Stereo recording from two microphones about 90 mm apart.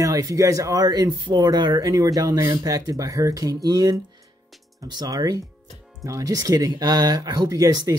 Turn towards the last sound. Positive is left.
turn(degrees=-45)  # may be behind; listen again after turning